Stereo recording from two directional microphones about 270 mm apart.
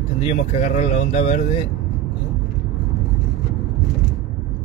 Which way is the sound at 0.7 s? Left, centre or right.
Left.